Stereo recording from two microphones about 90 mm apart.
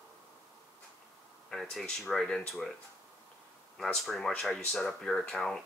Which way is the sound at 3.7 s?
5° left (ahead or behind).